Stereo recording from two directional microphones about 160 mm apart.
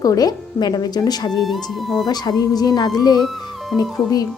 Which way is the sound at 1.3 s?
Centre (ahead or behind).